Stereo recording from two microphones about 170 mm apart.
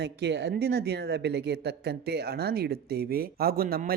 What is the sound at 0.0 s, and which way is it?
Speech, 75° right (ahead or behind).